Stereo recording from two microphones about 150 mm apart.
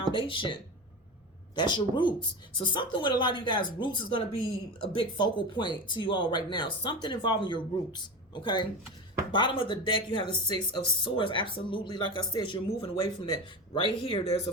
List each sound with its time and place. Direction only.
0.1 s speech: 35° left (ahead or behind)